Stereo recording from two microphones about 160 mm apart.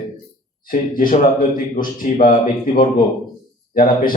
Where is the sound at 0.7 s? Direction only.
60° left (ahead or behind).